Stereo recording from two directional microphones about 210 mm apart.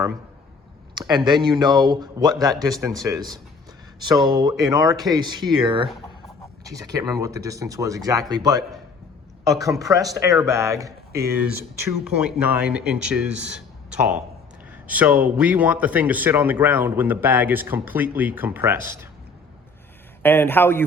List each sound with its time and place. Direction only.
1.1 s a man's voice: 20° right (ahead or behind)
20.2 s a man's voice: 10° left (ahead or behind)